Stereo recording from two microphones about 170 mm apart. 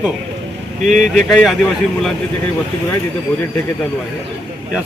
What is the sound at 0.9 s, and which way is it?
Speech, 45° right (ahead or behind).